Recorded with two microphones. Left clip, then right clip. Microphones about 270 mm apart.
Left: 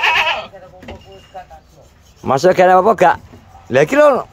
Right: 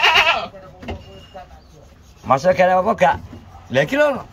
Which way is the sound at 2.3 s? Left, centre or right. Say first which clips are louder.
Left 5 dB; left.